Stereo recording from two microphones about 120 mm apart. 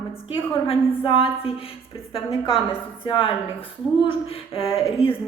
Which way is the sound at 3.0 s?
45° left (ahead or behind).